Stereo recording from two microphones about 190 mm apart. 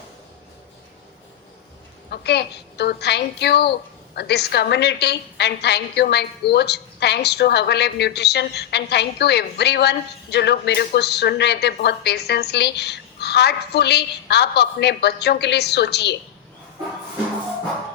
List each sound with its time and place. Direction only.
2.0 s a woman's voice: 60° left (ahead or behind)